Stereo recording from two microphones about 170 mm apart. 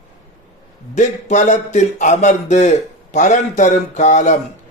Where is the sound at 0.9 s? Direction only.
45° left (ahead or behind).